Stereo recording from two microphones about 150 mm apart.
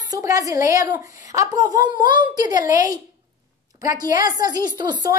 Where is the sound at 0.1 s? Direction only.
20° right (ahead or behind).